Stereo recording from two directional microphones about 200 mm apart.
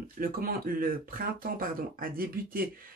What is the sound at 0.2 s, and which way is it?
Speech, 45° right (ahead or behind).